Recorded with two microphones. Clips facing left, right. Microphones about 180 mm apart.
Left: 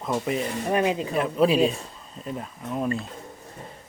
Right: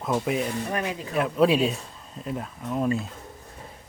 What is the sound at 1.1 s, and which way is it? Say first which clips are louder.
Speech: right 2 dB; centre (ahead or behind).